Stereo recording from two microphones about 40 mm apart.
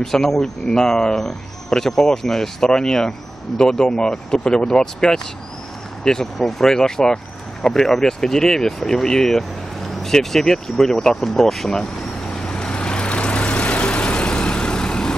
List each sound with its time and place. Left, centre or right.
0.0 s speech: centre
12.4 s vehicle: left